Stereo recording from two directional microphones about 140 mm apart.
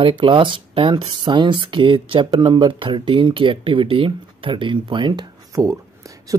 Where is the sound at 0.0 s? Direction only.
35° right (ahead or behind).